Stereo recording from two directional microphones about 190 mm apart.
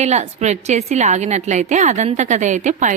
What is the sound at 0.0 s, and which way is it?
A woman's voice, 35° right (ahead or behind).